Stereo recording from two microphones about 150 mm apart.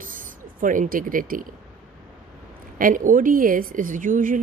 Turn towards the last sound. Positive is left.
turn(degrees=-60)  # may be behind; listen again after turning